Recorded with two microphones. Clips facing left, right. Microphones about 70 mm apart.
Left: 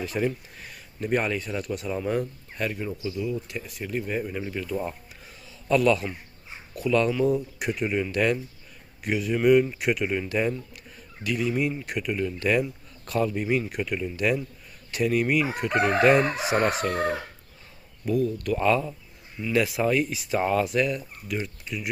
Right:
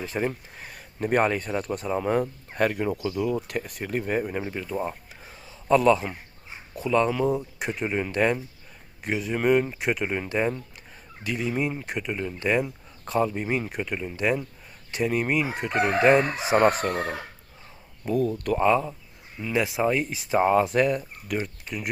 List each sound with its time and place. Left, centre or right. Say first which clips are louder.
0.0 s speech: left 1 dB; right
2.2 s speech: right 6 dB; right
4.4 s speech: left 1 dB; right
5.2 s a sound: right 2 dB; right
6.7 s speech: even; right
16.6 s speech: right 5 dB; right
18.1 s speech: even; right
18.5 s speech: right 2 dB; right
20.7 s speech: right 3 dB; right